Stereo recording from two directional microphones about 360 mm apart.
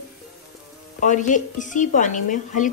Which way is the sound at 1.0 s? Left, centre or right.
Left.